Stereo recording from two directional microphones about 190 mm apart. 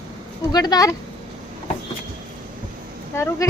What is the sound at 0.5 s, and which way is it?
Speech, 20° left (ahead or behind).